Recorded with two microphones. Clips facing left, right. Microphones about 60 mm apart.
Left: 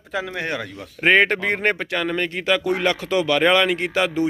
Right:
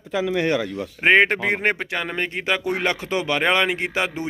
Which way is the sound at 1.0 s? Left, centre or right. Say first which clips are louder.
Even; centre.